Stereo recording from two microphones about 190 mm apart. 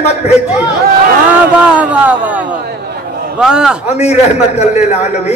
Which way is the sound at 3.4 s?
5° right (ahead or behind).